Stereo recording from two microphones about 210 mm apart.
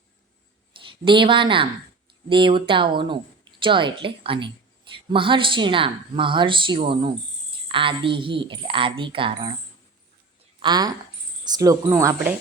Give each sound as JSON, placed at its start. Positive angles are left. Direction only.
{"t": 0.8, "sound": "a woman's voice", "side_deg": -25}
{"t": 10.6, "sound": "speech", "side_deg": -20}